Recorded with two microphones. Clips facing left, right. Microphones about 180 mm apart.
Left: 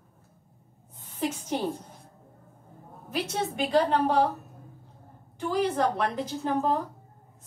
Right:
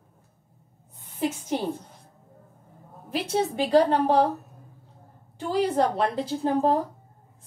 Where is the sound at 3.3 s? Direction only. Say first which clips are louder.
Right 5 dB; 40° right (ahead or behind).